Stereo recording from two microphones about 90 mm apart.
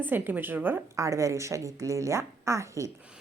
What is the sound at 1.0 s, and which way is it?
A woman's voice, 35° right (ahead or behind).